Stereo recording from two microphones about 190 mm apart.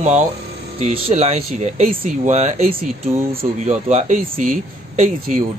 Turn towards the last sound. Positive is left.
turn(degrees=-40)  # may be behind; listen again after turning